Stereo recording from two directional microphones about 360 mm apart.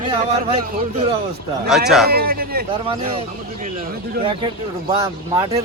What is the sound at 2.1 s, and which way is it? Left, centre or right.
Speech, right.